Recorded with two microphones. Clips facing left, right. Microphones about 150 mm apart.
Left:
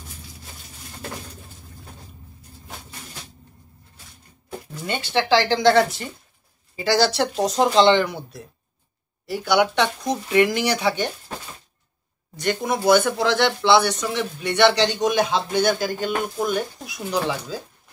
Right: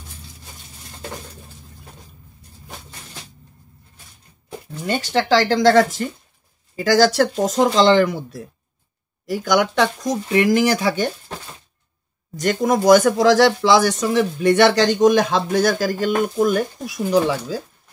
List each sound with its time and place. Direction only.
4.8 s speech: 40° right (ahead or behind)
9.2 s speech: 45° right (ahead or behind)
12.4 s speech: 45° right (ahead or behind)